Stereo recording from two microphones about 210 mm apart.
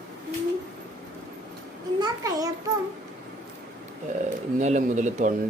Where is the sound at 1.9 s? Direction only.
20° right (ahead or behind).